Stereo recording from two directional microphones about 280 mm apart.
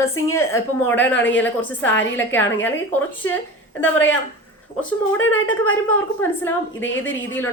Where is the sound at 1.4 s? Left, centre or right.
Centre.